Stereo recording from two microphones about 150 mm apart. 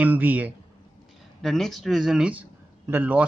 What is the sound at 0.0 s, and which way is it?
Speech, 10° right (ahead or behind).